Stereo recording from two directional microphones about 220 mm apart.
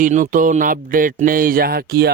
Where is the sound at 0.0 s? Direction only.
35° right (ahead or behind).